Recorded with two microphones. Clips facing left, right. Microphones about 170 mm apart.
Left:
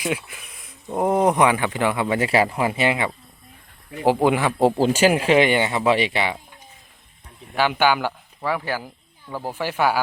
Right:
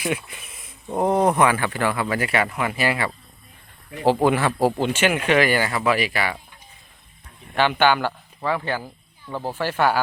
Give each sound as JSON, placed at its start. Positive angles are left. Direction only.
{"t": 0.3, "sound": "speech", "side_deg": 0}
{"t": 4.6, "sound": "speech", "side_deg": 35}
{"t": 7.5, "sound": "speech", "side_deg": 10}